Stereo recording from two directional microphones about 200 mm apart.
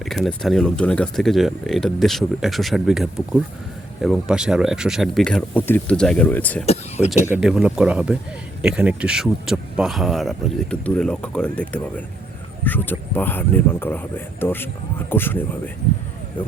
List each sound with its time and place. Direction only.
0.0 s speech: centre (ahead or behind)
6.7 s speech: 35° left (ahead or behind)
7.1 s speech: 5° right (ahead or behind)